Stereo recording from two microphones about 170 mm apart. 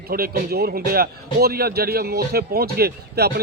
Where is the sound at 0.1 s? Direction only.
65° right (ahead or behind).